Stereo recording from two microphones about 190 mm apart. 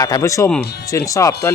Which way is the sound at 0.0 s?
15° left (ahead or behind).